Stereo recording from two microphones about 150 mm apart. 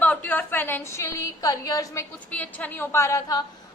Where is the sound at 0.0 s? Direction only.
10° left (ahead or behind).